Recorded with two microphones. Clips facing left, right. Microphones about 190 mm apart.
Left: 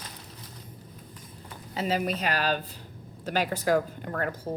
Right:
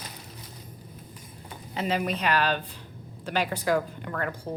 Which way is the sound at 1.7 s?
40° left (ahead or behind).